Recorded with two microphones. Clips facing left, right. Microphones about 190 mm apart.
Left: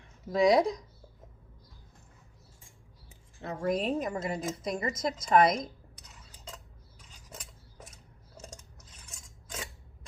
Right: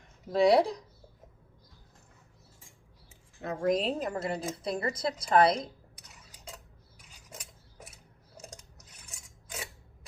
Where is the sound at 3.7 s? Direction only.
35° right (ahead or behind).